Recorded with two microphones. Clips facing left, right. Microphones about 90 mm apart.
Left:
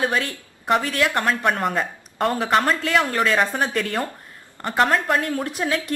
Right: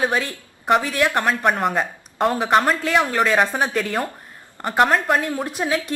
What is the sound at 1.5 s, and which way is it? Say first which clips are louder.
A woman's voice: right 2 dB; 5° right (ahead or behind).